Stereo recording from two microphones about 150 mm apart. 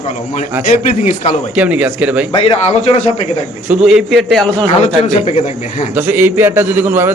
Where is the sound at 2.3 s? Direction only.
40° left (ahead or behind).